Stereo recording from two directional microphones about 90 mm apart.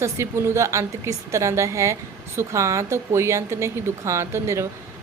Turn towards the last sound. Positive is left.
turn(degrees=-30)  # may be behind; listen again after turning